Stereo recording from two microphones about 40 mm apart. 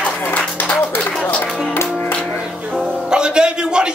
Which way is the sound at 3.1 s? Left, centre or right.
Right.